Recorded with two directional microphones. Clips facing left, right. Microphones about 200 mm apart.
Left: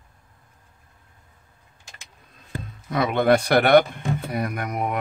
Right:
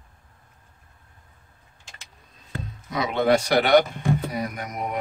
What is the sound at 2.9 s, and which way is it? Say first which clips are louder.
Speech: left 2 dB; 55° left (ahead or behind).